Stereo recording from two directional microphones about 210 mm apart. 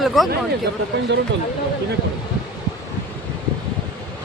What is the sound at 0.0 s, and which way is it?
Speech, centre (ahead or behind).